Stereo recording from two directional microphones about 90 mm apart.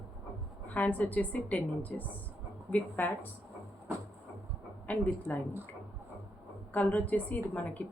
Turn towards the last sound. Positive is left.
turn(degrees=15)  # may be behind; listen again after turning